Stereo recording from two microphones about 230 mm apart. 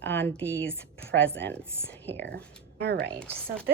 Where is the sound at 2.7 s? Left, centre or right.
Right.